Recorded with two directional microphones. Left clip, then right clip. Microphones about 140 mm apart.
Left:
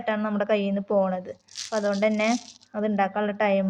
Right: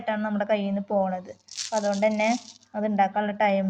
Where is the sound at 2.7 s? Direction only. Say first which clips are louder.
Right 1 dB; 20° left (ahead or behind).